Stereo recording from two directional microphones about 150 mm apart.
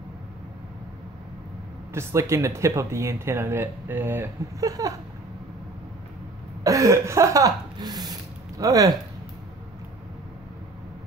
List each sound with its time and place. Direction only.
2.0 s speech: 20° right (ahead or behind)
6.6 s speech: 20° right (ahead or behind)